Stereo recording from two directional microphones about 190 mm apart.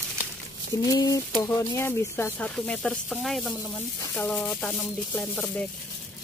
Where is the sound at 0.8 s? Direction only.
20° left (ahead or behind).